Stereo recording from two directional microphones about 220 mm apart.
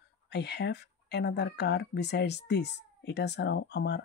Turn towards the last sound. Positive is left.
turn(degrees=50)  # may be behind; listen again after turning